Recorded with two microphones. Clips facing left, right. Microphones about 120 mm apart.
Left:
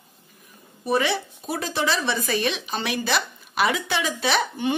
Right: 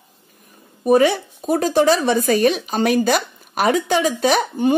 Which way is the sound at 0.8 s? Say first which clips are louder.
Right 8 dB; 45° right (ahead or behind).